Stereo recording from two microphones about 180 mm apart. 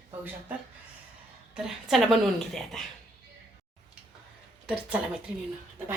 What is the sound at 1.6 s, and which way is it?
A woman's voice, centre (ahead or behind).